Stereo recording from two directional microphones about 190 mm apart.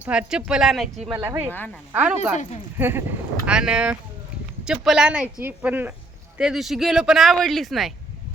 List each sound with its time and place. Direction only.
0.0 s speech: 5° right (ahead or behind)
1.1 s speech: 15° right (ahead or behind); by 7.9 s centre (ahead or behind)